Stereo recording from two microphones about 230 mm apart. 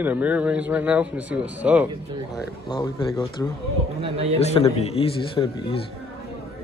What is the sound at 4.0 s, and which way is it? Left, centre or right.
Speech, right.